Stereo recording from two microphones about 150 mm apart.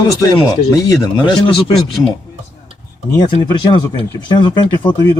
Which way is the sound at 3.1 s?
30° left (ahead or behind).